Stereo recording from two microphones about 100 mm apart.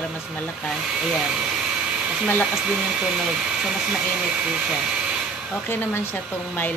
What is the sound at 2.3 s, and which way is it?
Speech, 5° right (ahead or behind).